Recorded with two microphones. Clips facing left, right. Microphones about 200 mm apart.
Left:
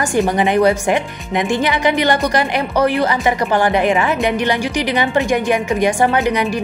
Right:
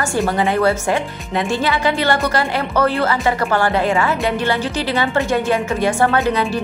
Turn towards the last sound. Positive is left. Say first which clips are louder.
# left 1 dB
turn(degrees=15)  # may be behind; listen again after turning